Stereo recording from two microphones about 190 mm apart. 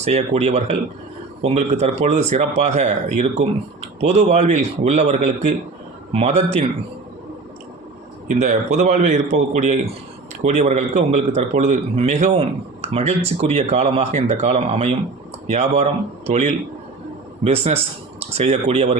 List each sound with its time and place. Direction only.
0.0 s a man's voice: 35° right (ahead or behind)
8.3 s a man's voice: 40° right (ahead or behind)